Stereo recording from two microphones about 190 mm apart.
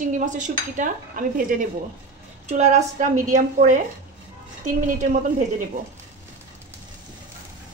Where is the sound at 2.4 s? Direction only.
35° right (ahead or behind).